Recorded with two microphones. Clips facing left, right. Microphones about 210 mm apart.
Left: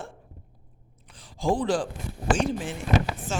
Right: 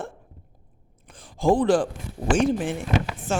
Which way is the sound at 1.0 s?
50° right (ahead or behind).